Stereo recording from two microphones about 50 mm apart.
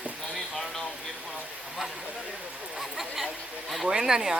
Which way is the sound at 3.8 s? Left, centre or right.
Centre.